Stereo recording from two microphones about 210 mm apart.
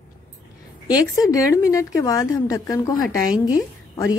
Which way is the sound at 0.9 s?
15° left (ahead or behind).